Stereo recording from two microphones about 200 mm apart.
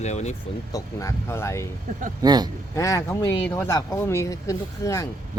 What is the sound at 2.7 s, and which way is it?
Speech, 15° left (ahead or behind).